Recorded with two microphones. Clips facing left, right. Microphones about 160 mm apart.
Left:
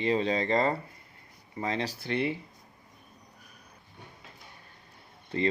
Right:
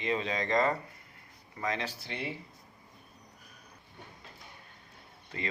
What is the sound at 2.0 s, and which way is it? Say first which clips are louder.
Speech: left 10 dB; 60° left (ahead or behind).